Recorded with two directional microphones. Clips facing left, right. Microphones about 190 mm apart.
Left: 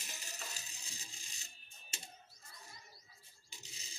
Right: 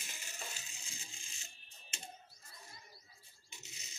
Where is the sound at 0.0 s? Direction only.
40° left (ahead or behind).